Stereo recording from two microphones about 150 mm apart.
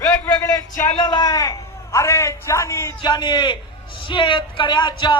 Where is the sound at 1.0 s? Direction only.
30° left (ahead or behind).